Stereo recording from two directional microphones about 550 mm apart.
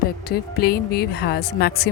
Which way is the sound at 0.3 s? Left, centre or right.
Centre.